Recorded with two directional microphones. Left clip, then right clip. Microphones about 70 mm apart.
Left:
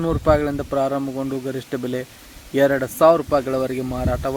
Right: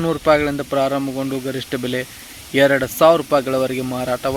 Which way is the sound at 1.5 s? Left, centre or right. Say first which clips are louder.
Right 3 dB; left.